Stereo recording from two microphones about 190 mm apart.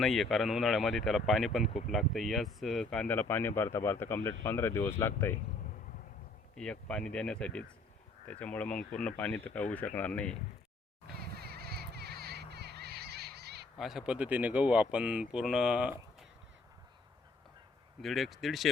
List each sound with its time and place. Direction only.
0.0 s speech: centre (ahead or behind)
6.6 s speech: 5° left (ahead or behind)
11.3 s a sound: 55° right (ahead or behind)
13.7 s speech: centre (ahead or behind)
18.0 s speech: centre (ahead or behind)